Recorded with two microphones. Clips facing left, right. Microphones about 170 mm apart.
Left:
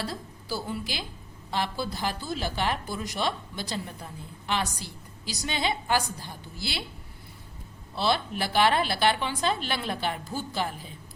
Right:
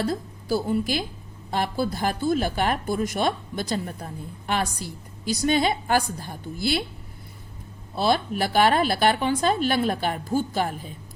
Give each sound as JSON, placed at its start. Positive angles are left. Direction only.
{"t": 0.0, "sound": "a woman's voice", "side_deg": -50}
{"t": 7.9, "sound": "a woman's voice", "side_deg": -45}